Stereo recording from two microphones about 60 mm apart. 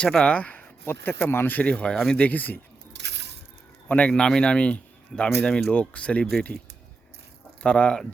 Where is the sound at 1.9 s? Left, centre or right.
Centre.